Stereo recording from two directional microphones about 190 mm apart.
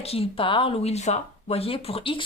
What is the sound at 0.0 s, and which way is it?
Speech, 30° left (ahead or behind).